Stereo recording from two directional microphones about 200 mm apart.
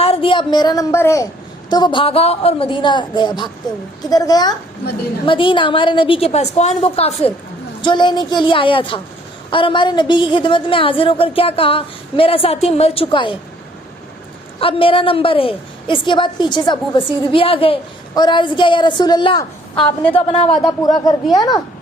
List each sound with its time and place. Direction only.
0.0 s a woman's voice: 25° left (ahead or behind)
14.6 s a woman's voice: 25° left (ahead or behind)
19.7 s a woman's voice: 5° left (ahead or behind)
20.8 s a woman's voice: 20° left (ahead or behind)